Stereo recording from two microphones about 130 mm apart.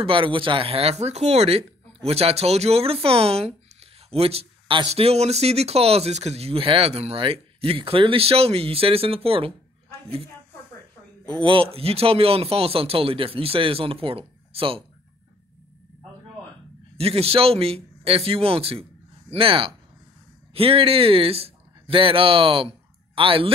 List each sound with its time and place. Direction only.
0.0 s speech: 40° right (ahead or behind)
11.4 s speech: 45° right (ahead or behind)
16.9 s a man's voice: 50° right (ahead or behind)